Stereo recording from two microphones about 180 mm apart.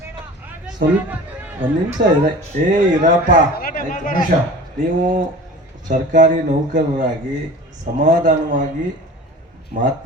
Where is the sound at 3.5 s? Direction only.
55° left (ahead or behind).